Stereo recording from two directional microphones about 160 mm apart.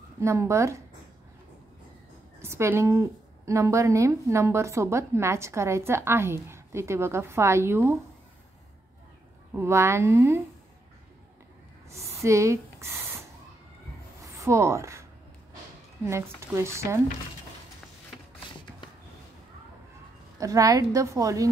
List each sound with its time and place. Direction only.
0.2 s a woman's voice: 20° right (ahead or behind)
2.4 s a woman's voice: 15° right (ahead or behind)
9.6 s a woman's voice: 15° right (ahead or behind)
11.9 s a sound: 20° right (ahead or behind)
14.4 s speech: 15° right (ahead or behind)
16.3 s a woman's voice: 15° right (ahead or behind)
20.3 s a woman's voice: 20° right (ahead or behind)